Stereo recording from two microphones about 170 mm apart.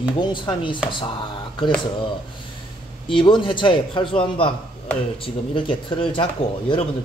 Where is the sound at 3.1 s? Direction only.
30° left (ahead or behind).